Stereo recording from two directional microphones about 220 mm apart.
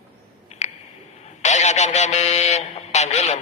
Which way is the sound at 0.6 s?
30° left (ahead or behind).